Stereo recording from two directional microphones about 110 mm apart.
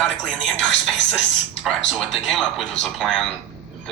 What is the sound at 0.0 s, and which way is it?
Speech, centre (ahead or behind).